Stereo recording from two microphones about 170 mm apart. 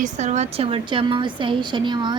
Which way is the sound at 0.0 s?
45° right (ahead or behind).